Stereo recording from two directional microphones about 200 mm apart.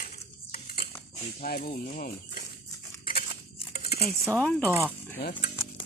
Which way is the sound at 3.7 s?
50° left (ahead or behind).